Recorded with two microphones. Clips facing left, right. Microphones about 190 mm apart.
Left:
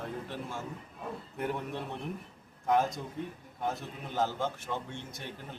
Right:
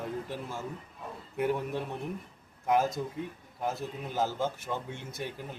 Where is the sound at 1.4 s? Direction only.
5° right (ahead or behind).